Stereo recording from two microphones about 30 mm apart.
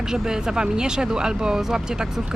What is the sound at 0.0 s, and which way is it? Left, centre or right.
Speech, centre.